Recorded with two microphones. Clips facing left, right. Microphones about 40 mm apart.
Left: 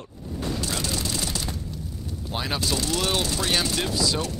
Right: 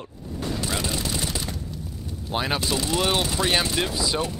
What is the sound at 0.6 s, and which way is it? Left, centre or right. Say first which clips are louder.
Music: right 1 dB; centre.